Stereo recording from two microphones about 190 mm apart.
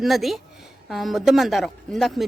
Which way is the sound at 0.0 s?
Centre (ahead or behind).